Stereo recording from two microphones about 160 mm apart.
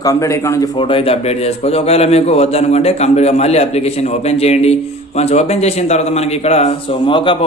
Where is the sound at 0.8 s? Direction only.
35° left (ahead or behind).